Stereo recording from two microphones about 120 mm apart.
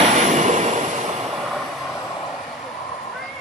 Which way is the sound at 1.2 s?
Centre (ahead or behind).